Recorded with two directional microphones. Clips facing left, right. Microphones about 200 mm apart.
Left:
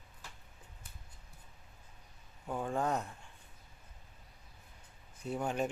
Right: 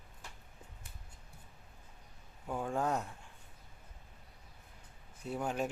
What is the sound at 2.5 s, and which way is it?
Speech, centre (ahead or behind).